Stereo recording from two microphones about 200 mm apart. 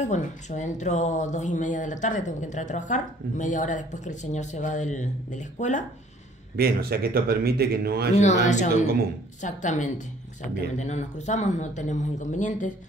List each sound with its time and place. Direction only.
0.0 s speech: 35° left (ahead or behind)
6.5 s a man's voice: 50° right (ahead or behind)
8.2 s speech: 35° left (ahead or behind)